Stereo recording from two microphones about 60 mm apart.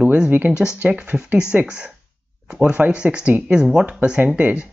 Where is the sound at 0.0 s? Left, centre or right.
Centre.